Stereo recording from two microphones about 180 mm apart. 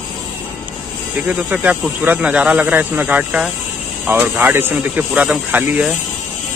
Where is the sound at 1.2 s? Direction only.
10° right (ahead or behind).